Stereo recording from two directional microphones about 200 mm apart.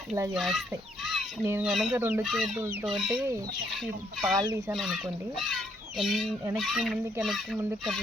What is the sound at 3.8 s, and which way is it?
Speech, centre (ahead or behind).